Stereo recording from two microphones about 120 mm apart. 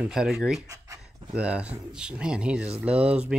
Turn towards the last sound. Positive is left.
turn(degrees=-10)  # may be behind; listen again after turning